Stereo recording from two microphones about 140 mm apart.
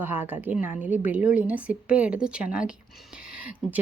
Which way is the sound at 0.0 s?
15° right (ahead or behind).